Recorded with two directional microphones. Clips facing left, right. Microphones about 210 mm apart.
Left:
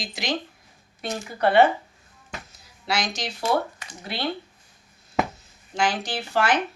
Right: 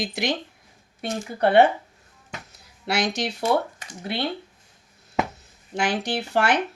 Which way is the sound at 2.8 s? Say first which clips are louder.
Right 3 dB; 60° right (ahead or behind).